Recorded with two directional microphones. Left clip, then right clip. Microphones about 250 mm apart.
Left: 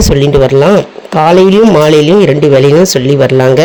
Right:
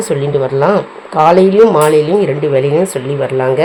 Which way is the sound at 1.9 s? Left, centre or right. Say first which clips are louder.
Left 5 dB; left.